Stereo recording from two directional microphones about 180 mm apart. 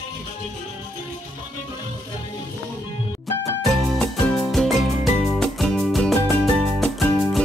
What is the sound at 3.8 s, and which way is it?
Music, 5° left (ahead or behind).